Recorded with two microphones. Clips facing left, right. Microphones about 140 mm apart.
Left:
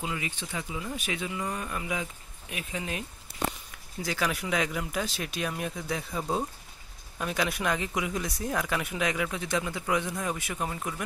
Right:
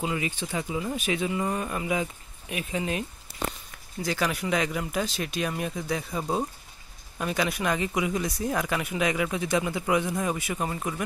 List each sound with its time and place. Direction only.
0.0 s speech: 35° right (ahead or behind)
4.0 s speech: centre (ahead or behind)